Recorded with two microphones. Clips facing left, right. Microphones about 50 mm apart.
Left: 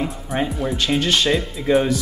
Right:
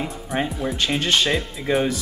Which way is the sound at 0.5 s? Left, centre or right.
Centre.